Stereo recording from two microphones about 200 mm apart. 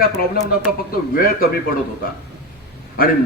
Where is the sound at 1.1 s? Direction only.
45° left (ahead or behind).